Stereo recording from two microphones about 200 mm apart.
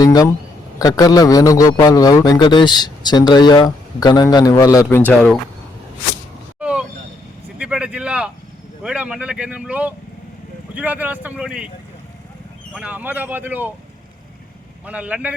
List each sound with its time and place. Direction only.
0.0 s a man's voice: 20° left (ahead or behind)
6.6 s vehicle: 5° right (ahead or behind)
8.8 s speech: 5° right (ahead or behind)
12.7 s speech: 5° right (ahead or behind)
14.8 s speech: 5° right (ahead or behind)